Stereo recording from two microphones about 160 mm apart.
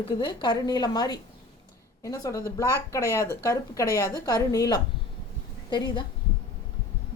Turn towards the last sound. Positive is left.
turn(degrees=30)  # may be behind; listen again after turning